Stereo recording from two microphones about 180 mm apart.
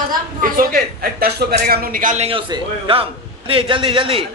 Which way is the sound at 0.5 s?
55° right (ahead or behind).